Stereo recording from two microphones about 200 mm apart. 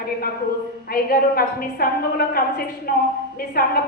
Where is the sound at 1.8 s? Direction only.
45° left (ahead or behind).